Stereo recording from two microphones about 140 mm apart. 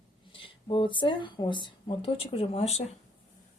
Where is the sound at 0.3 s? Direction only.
40° left (ahead or behind).